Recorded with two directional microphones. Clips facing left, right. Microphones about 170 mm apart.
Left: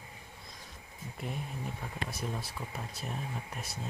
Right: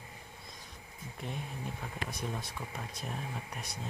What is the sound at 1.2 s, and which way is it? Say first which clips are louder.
Speech: left 1 dB; centre (ahead or behind).